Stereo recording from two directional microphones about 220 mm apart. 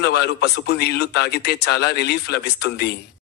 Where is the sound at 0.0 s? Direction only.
50° left (ahead or behind).